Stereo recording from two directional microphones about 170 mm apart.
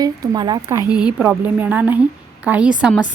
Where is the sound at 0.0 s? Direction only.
25° right (ahead or behind).